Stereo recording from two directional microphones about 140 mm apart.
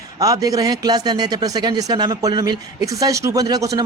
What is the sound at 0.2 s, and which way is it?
A man's voice, 25° right (ahead or behind).